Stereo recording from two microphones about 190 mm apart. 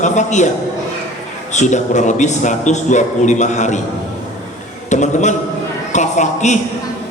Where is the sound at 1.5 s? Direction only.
40° left (ahead or behind).